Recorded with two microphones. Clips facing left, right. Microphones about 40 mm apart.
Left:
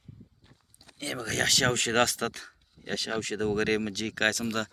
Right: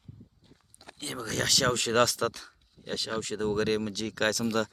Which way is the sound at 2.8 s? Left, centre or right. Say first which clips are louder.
Left 1 dB; left.